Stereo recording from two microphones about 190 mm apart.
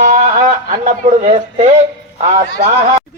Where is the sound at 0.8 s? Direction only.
35° right (ahead or behind).